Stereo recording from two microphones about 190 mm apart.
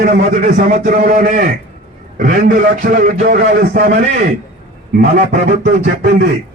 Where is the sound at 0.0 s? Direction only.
40° right (ahead or behind).